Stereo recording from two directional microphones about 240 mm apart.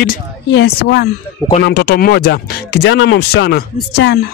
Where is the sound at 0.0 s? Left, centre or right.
Left.